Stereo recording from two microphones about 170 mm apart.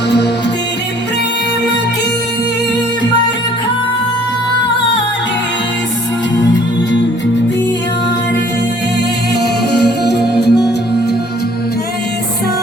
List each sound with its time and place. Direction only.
9.7 s music: 75° left (ahead or behind)